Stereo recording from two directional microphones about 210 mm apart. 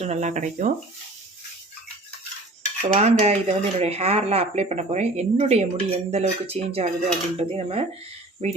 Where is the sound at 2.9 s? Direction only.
30° right (ahead or behind).